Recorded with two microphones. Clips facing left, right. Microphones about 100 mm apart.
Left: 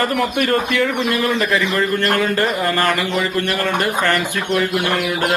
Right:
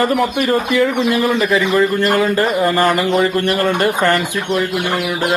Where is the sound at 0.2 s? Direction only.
5° right (ahead or behind).